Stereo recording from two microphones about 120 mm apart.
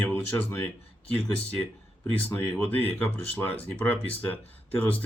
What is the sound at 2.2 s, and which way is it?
Speech, 10° left (ahead or behind).